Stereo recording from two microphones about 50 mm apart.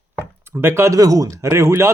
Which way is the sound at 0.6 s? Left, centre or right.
Right.